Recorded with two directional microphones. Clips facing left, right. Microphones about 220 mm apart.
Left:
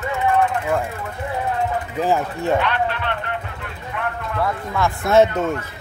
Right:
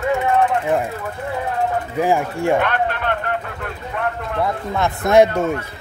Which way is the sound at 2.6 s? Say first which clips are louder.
Right 2 dB; 50° right (ahead or behind).